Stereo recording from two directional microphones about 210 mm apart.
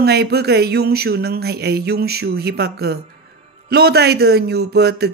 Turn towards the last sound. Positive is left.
turn(degrees=-50)  # may be behind; listen again after turning